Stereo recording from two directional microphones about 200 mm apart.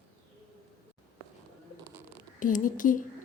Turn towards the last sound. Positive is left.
turn(degrees=40)  # may be behind; listen again after turning